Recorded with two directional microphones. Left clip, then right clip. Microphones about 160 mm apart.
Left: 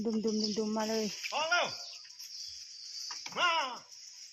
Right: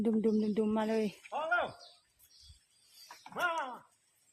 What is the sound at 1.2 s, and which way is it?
Cricket, 55° right (ahead or behind).